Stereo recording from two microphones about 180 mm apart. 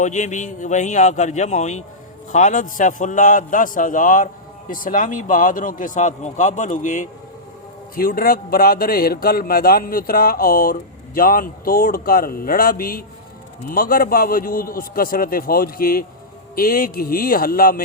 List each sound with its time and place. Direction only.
0.0 s a man's voice: 40° left (ahead or behind)